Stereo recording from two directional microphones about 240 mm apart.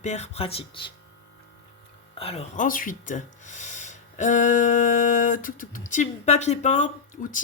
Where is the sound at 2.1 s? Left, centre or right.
Left.